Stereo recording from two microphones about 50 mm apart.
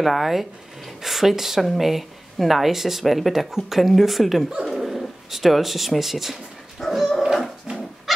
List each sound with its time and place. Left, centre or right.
0.0 s speech: centre
6.8 s dog: centre
7.7 s dog: right